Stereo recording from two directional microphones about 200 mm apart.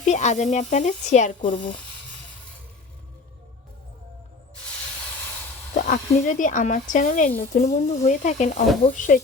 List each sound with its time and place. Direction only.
0.0 s speech: 35° left (ahead or behind)
1.4 s speech: 25° left (ahead or behind)
5.7 s speech: 40° left (ahead or behind)